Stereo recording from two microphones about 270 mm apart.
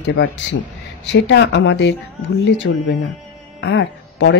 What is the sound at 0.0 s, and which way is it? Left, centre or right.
Speech, left.